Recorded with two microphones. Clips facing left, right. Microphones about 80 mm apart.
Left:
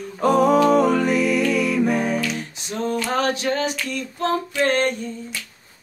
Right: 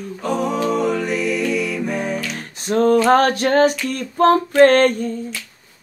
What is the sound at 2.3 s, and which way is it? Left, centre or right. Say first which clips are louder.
A capella: right 9 dB; right.